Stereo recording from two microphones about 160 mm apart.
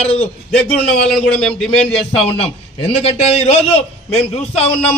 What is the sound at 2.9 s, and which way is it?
A man's voice, 40° left (ahead or behind).